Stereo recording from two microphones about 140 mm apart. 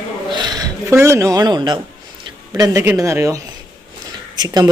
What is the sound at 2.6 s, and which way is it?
Speech, 20° right (ahead or behind).